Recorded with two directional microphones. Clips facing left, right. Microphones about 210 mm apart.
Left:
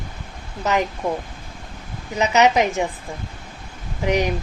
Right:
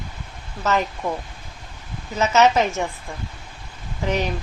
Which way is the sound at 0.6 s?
15° left (ahead or behind).